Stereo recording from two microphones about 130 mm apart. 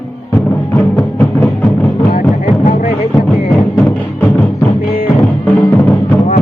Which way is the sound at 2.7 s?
90° left.